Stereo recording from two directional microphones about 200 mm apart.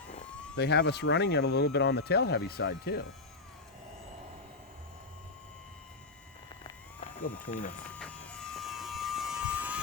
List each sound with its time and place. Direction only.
0.5 s speech: 55° left (ahead or behind)
7.0 s a sound: 45° left (ahead or behind)
7.5 s speech: 40° left (ahead or behind)
7.9 s vehicle: 5° left (ahead or behind)